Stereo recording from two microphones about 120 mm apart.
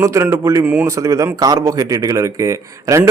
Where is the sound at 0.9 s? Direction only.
25° right (ahead or behind).